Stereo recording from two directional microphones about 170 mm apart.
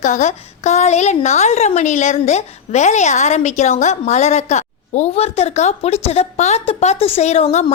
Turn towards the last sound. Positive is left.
turn(degrees=40)  # may be behind; listen again after turning